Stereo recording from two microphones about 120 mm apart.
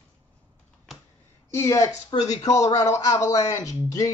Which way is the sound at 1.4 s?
25° left (ahead or behind).